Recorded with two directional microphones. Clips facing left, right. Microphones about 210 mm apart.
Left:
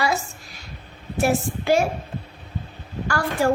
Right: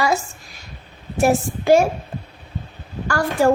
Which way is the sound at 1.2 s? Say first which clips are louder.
Right 4 dB; 45° right (ahead or behind).